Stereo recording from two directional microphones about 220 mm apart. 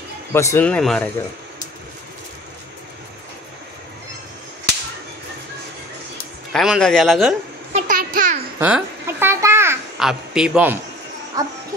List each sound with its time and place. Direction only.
0.3 s a man's voice: 10° left (ahead or behind)
6.5 s a man's voice: centre (ahead or behind)
7.7 s babbling: 40° right (ahead or behind)
8.5 s a sound: 5° right (ahead or behind)
9.9 s a man's voice: centre (ahead or behind)